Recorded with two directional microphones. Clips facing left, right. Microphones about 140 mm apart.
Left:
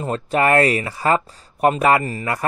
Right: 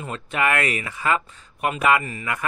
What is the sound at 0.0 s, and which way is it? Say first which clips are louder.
Speech: left 6 dB; 35° left (ahead or behind).